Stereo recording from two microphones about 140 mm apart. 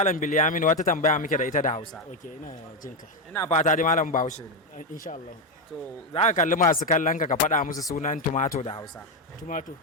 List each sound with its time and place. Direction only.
0.0 s speech: 60° left (ahead or behind)
3.5 s speech: 60° left (ahead or behind)
6.1 s speech: 60° left (ahead or behind)
6.7 s speech: 75° left (ahead or behind); by 8.7 s 60° left (ahead or behind)
9.4 s speech: 70° left (ahead or behind)